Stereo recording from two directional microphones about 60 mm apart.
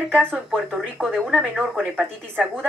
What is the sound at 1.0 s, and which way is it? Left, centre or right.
Speech, centre.